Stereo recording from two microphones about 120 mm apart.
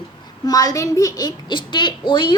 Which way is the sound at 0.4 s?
30° left (ahead or behind).